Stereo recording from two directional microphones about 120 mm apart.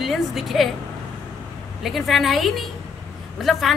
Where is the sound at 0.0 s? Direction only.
Centre (ahead or behind).